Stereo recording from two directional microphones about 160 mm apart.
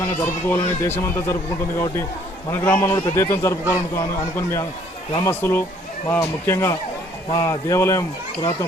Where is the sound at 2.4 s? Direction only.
15° left (ahead or behind).